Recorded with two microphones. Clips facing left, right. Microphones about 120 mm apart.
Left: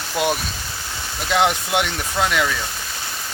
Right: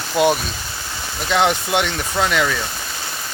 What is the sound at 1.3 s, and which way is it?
Speech, 10° left (ahead or behind).